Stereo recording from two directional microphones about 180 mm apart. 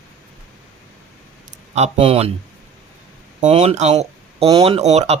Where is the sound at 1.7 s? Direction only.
35° right (ahead or behind).